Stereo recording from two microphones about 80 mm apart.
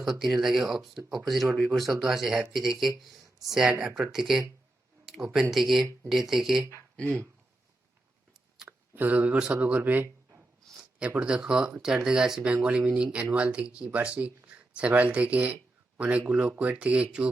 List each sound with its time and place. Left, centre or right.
0.0 s speech: centre
8.6 s speech: right